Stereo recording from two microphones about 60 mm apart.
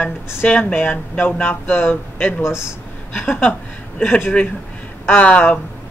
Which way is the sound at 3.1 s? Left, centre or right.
Left.